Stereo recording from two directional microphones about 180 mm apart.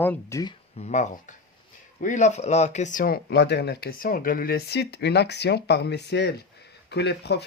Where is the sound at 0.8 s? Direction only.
40° left (ahead or behind).